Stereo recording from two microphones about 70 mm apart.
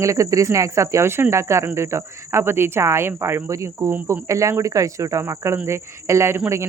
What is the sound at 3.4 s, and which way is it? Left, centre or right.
Speech, right.